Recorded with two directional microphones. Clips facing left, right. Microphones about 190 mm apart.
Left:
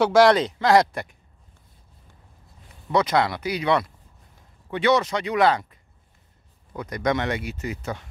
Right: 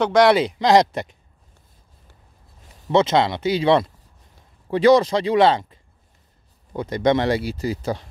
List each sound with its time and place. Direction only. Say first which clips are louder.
0.0 s speech: even; 5° left (ahead or behind)
0.3 s speech: right 2 dB; 10° right (ahead or behind)
2.9 s speech: right 4 dB; 25° right (ahead or behind)